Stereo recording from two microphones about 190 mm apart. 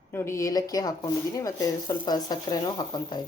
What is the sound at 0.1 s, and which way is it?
Speech, 15° left (ahead or behind).